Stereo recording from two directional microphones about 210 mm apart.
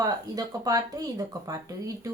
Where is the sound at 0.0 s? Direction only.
15° right (ahead or behind).